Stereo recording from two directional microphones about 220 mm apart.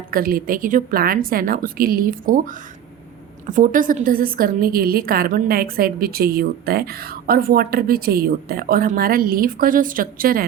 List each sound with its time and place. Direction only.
0.1 s a woman's voice: 40° right (ahead or behind)
3.5 s a woman's voice: 35° right (ahead or behind)